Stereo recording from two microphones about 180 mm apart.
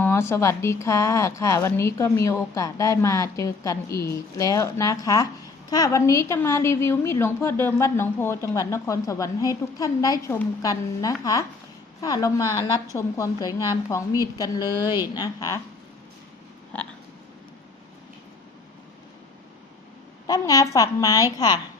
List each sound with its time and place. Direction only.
0.0 s a woman's voice: 15° left (ahead or behind)
20.2 s a woman's voice: 20° left (ahead or behind)